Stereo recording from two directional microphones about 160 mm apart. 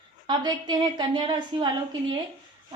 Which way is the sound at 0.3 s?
25° right (ahead or behind).